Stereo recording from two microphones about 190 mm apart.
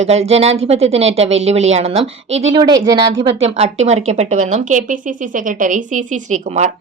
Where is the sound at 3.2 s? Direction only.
35° right (ahead or behind).